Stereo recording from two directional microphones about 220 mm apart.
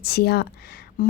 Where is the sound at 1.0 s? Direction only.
40° left (ahead or behind).